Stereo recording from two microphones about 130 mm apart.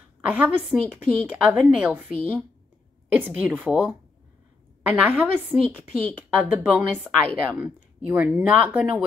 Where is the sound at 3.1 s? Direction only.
15° right (ahead or behind).